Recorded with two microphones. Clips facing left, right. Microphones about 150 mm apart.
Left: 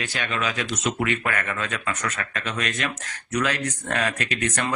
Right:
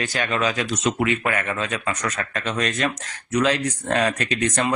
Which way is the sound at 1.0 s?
20° right (ahead or behind).